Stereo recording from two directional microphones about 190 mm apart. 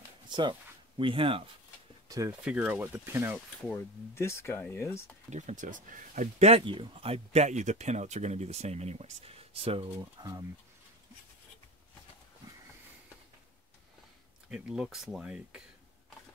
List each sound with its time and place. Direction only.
0.3 s speech: 25° right (ahead or behind)
2.0 s speech: 15° right (ahead or behind)
2.4 s speech: 5° right (ahead or behind)
3.6 s speech: 15° left (ahead or behind)
5.3 s speech: 40° right (ahead or behind)
6.5 s speech: 25° right (ahead or behind)
9.9 s speech: 20° right (ahead or behind)
14.5 s speech: 5° right (ahead or behind)